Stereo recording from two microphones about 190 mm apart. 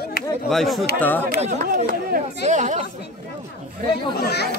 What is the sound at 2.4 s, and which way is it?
Speech, 40° right (ahead or behind).